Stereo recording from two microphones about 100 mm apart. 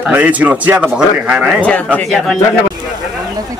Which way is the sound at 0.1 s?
15° right (ahead or behind).